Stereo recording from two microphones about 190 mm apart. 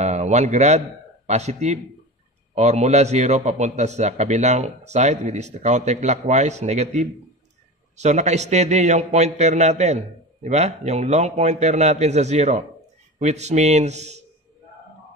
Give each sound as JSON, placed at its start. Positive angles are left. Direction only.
{"t": 0.0, "sound": "a man's voice", "side_deg": -35}